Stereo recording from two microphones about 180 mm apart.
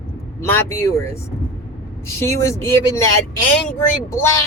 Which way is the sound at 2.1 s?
15° left (ahead or behind).